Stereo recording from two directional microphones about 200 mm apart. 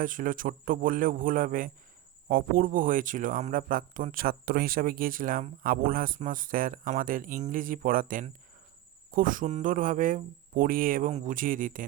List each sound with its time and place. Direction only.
0.0 s speech: 40° right (ahead or behind)